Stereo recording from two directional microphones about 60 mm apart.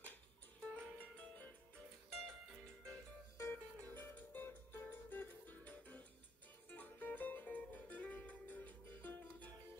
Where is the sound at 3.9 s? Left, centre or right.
Left.